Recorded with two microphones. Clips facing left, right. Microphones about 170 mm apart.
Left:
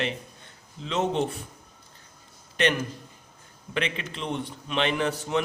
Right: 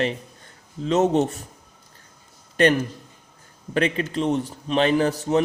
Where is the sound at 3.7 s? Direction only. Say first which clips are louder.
Right 8 dB; 40° right (ahead or behind).